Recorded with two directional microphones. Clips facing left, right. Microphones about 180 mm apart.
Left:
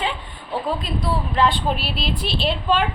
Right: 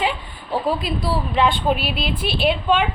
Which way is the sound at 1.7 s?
55° right (ahead or behind).